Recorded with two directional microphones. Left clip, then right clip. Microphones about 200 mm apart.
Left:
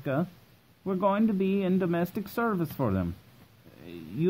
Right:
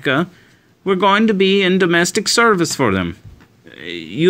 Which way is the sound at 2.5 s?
25° right (ahead or behind).